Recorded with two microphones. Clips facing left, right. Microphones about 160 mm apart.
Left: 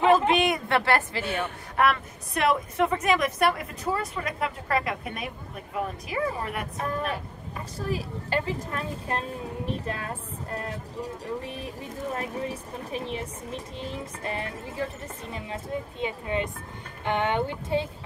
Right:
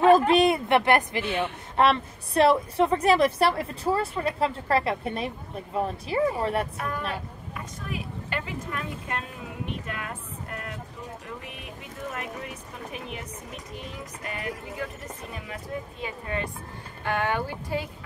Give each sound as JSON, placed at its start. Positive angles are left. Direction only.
{"t": 0.3, "sound": "a sound", "side_deg": -35}
{"t": 0.7, "sound": "a woman's voice", "side_deg": -20}
{"t": 7.5, "sound": "a woman's voice", "side_deg": 35}